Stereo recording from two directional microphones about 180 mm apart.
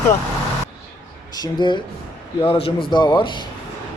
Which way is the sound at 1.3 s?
25° left (ahead or behind).